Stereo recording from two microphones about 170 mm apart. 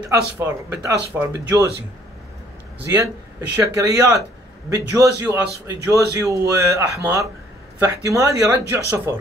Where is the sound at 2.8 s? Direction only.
15° right (ahead or behind).